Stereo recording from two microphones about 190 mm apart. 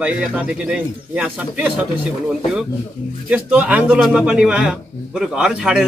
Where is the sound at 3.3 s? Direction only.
5° right (ahead or behind).